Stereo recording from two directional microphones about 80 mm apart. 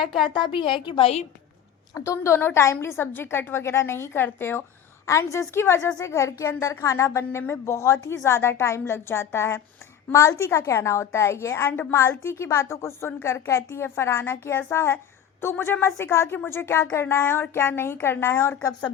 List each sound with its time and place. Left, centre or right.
0.0 s a woman's voice: centre
0.3 s a woman's voice: left
2.0 s a woman's voice: left
5.0 s a woman's voice: left